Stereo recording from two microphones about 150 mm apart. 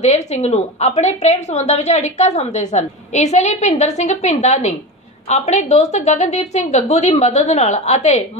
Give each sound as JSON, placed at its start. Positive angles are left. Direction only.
{"t": 0.0, "sound": "a woman's voice", "side_deg": 50}